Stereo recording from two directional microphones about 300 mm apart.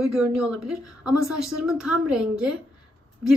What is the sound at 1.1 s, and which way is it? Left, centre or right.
Speech, left.